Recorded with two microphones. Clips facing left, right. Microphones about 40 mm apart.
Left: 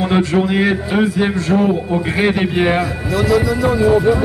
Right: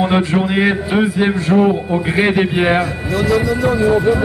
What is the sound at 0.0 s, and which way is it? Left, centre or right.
A man's voice, centre.